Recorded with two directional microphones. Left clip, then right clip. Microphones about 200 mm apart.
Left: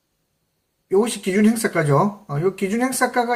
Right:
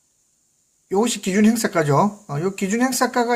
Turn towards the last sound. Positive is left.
turn(degrees=-40)  # may be behind; listen again after turning